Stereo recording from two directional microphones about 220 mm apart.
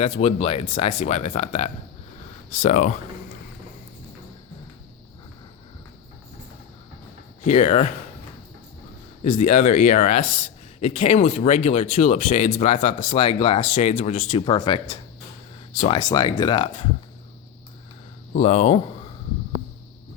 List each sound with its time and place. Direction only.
0.0 s speech: 30° left (ahead or behind)
7.4 s speech: 30° left (ahead or behind)
9.4 s speech: 30° left (ahead or behind)
16.0 s speech: 20° left (ahead or behind)
18.3 s speech: 30° left (ahead or behind)